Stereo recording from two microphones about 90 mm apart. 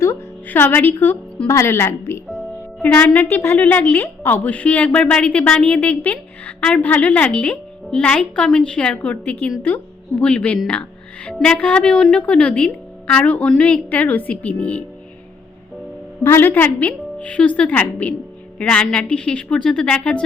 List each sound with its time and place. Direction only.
0.0 s music: 25° left (ahead or behind)
1.5 s a woman's voice: 30° left (ahead or behind)
2.8 s a woman's voice: 20° left (ahead or behind)
16.2 s a woman's voice: 25° left (ahead or behind)